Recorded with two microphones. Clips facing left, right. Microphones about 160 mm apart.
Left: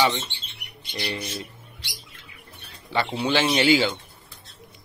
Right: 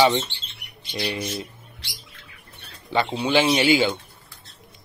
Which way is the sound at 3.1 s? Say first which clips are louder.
Right 2 dB; 15° right (ahead or behind).